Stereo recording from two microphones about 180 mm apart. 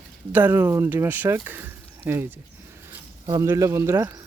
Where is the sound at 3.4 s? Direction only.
20° right (ahead or behind).